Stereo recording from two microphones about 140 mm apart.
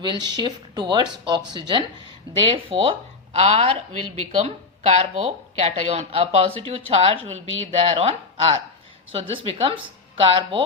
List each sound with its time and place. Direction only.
0.0 s speech: 35° right (ahead or behind)